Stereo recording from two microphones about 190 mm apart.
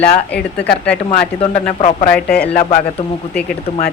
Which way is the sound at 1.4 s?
35° left (ahead or behind).